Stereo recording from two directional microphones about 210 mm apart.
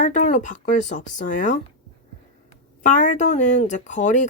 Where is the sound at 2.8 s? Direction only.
35° left (ahead or behind).